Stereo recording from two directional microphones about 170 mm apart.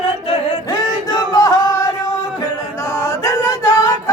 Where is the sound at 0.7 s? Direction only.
25° left (ahead or behind).